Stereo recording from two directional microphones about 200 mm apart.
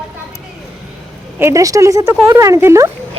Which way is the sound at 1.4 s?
15° right (ahead or behind).